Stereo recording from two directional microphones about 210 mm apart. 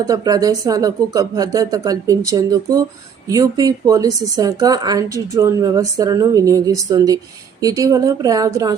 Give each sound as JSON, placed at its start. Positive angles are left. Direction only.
{"t": 0.0, "sound": "speech", "side_deg": -15}